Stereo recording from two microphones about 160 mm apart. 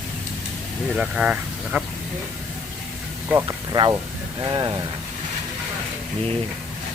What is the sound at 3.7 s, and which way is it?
Speech, 25° right (ahead or behind).